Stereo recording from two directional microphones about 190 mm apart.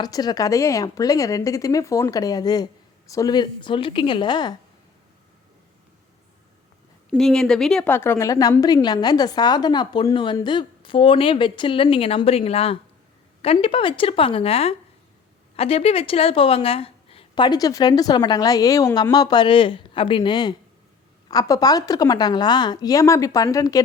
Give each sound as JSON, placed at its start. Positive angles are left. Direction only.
{"t": 0.0, "sound": "a woman's voice", "side_deg": 20}
{"t": 7.1, "sound": "a woman's voice", "side_deg": 0}